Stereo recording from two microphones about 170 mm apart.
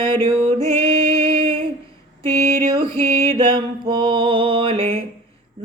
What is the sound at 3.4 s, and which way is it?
Mantra, 30° right (ahead or behind).